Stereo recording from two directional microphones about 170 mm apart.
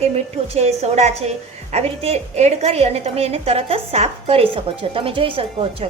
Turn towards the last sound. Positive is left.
turn(degrees=-35)  # may be behind; listen again after turning